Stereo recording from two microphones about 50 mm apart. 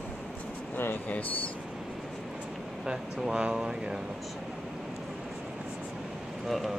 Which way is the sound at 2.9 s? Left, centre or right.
Centre.